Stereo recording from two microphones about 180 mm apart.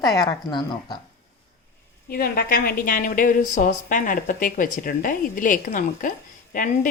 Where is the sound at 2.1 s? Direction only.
55° left (ahead or behind).